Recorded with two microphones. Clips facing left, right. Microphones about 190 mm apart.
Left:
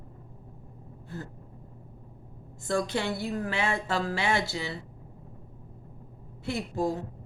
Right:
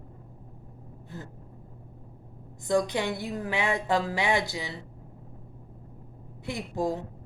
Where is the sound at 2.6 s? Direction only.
15° right (ahead or behind).